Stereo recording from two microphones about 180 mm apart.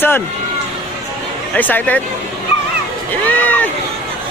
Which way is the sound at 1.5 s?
10° left (ahead or behind).